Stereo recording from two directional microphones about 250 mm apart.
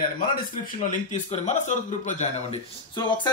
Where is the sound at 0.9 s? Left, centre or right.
Left.